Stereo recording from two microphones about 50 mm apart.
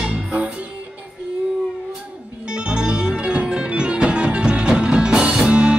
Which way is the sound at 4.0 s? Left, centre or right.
Right.